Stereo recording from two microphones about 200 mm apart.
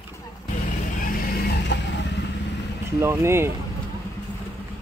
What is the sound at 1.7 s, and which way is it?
Vehicle, 60° left (ahead or behind).